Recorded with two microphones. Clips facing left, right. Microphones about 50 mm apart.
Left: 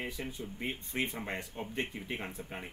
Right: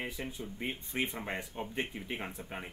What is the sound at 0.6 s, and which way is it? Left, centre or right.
Speech, centre.